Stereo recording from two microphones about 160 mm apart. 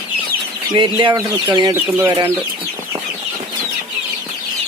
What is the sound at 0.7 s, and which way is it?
Speech, 30° right (ahead or behind).